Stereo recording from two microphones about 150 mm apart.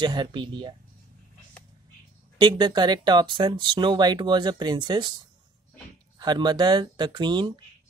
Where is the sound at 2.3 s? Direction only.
30° right (ahead or behind).